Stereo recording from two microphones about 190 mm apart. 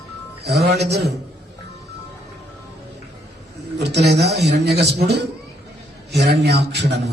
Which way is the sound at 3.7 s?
60° right (ahead or behind).